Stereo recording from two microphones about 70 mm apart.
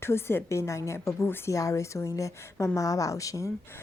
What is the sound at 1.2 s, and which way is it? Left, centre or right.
Speech, left.